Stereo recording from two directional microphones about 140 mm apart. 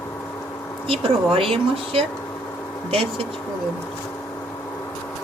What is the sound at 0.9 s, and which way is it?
Speech, 40° right (ahead or behind).